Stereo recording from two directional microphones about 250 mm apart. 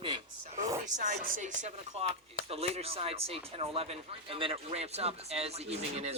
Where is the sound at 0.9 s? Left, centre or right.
Right.